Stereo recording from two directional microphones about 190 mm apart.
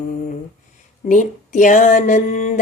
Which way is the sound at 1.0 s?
40° left (ahead or behind).